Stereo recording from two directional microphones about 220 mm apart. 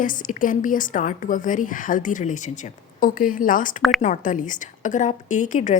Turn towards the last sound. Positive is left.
turn(degrees=35)  # may be behind; listen again after turning